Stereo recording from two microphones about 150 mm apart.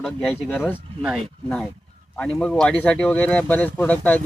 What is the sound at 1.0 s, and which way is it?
Speech, centre (ahead or behind).